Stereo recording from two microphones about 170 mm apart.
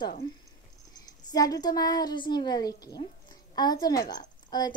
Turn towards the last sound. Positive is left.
turn(degrees=25)  # may be behind; listen again after turning